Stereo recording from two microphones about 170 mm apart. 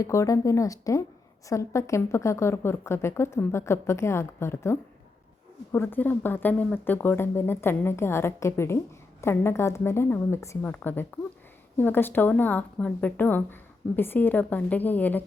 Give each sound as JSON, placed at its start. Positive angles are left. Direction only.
{"t": 0.0, "sound": "speech", "side_deg": 20}